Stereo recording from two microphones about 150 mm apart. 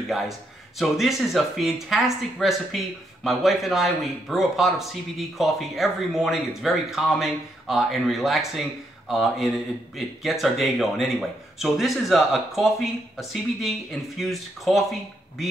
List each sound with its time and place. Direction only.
0.7 s speech: centre (ahead or behind)